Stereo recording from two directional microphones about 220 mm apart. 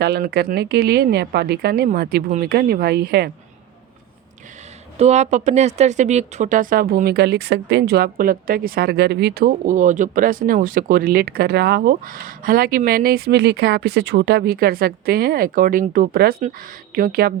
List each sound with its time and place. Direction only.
0.0 s speech: 45° right (ahead or behind)
4.9 s speech: 30° right (ahead or behind)